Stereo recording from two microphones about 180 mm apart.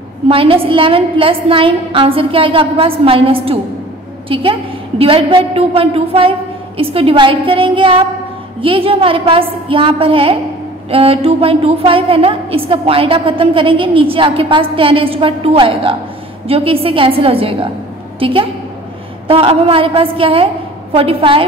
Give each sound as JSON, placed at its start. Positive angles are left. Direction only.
{"t": 0.3, "sound": "a woman's voice", "side_deg": -30}